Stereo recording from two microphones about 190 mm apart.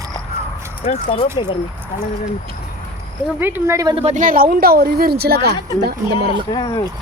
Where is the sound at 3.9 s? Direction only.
35° right (ahead or behind); by 6.3 s 60° right (ahead or behind).